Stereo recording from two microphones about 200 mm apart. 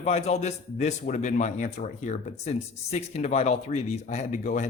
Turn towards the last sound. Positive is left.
turn(degrees=40)  # may be behind; listen again after turning